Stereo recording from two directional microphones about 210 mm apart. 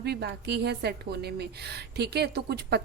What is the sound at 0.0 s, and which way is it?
A woman's voice, 50° right (ahead or behind).